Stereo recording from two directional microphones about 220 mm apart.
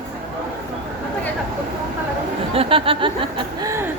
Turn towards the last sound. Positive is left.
turn(degrees=-15)  # may be behind; listen again after turning